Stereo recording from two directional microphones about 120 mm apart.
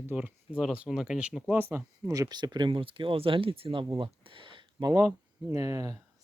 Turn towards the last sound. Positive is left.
turn(degrees=-30)  # may be behind; listen again after turning